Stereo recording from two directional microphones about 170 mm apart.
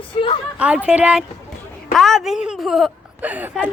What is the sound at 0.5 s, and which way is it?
A woman's voice, 5° right (ahead or behind).